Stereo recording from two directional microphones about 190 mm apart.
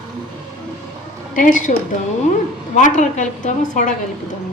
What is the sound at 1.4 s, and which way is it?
A woman's voice, 45° left (ahead or behind).